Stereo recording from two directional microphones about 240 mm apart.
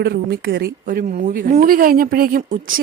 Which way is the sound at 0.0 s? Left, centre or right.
Right.